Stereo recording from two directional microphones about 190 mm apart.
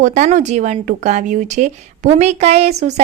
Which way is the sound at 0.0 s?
40° right (ahead or behind).